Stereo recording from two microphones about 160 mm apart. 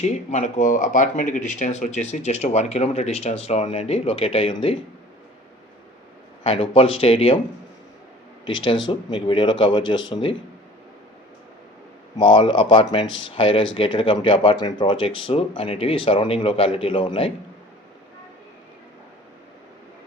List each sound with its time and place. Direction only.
0.0 s speech: 50° left (ahead or behind)
6.4 s speech: 35° left (ahead or behind)
8.6 s speech: 30° left (ahead or behind)
12.1 s speech: 30° left (ahead or behind)